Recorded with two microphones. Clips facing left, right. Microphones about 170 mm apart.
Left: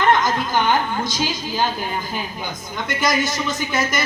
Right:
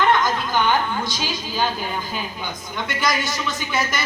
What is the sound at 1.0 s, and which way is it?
Speech, 45° left (ahead or behind).